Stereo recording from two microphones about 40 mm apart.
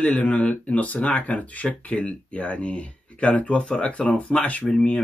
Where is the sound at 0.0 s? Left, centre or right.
Left.